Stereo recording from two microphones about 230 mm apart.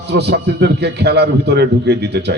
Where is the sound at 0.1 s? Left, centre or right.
Right.